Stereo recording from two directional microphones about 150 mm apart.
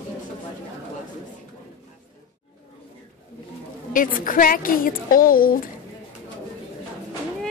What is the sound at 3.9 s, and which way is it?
A woman's voice, 65° left (ahead or behind).